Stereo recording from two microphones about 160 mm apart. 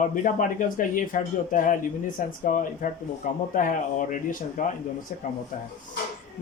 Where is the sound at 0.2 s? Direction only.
55° left (ahead or behind).